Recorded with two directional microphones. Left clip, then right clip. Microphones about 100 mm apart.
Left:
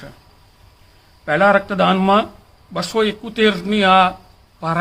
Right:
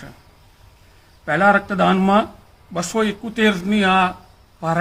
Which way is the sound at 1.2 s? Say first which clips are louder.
Left 2 dB; 25° left (ahead or behind).